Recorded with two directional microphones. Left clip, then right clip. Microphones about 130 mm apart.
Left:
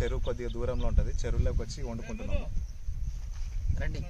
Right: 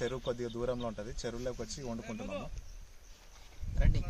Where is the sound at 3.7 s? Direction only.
5° right (ahead or behind).